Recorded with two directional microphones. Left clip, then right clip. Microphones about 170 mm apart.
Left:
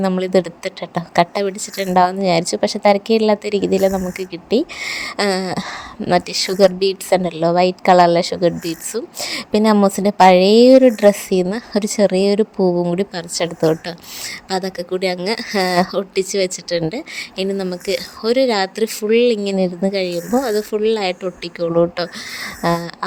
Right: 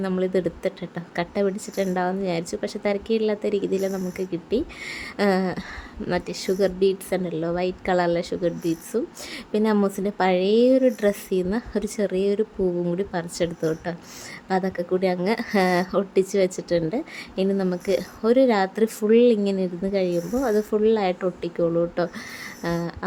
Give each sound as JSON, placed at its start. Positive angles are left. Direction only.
{"t": 0.0, "sound": "a woman's voice", "side_deg": 25}